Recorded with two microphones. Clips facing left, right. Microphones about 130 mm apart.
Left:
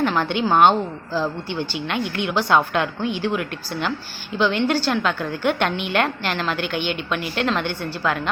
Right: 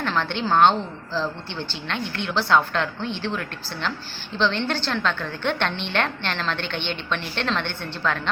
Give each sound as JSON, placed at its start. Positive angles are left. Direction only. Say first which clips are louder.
{"t": 0.0, "sound": "a woman's voice", "louder": "left 5 dB", "side_deg": 15}